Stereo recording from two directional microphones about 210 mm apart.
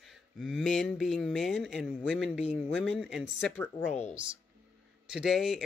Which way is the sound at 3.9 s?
35° left (ahead or behind).